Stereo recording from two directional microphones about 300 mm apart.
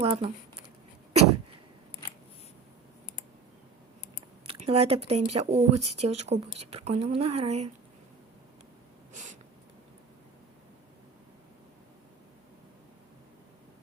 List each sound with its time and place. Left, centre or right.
0.0 s speech: centre
4.4 s speech: centre
9.1 s a sound: right